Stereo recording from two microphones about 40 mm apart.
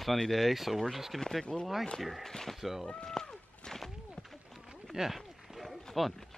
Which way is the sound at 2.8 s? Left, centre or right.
Centre.